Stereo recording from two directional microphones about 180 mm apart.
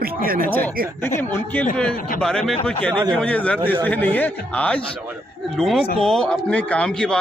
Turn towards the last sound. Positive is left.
turn(degrees=5)  # may be behind; listen again after turning